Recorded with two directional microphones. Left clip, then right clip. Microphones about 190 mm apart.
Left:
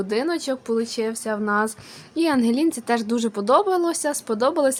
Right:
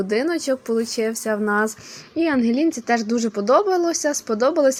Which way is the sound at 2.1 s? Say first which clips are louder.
Right 1 dB; centre (ahead or behind).